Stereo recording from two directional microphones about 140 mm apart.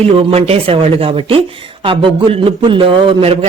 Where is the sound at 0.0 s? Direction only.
45° right (ahead or behind).